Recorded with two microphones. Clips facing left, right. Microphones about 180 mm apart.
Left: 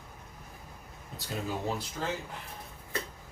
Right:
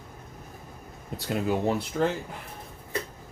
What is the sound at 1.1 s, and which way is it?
Speech, 65° right (ahead or behind).